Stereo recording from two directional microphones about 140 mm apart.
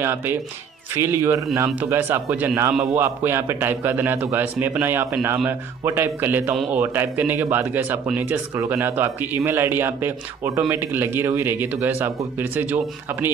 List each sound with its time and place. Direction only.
0.0 s a man's voice: 15° right (ahead or behind)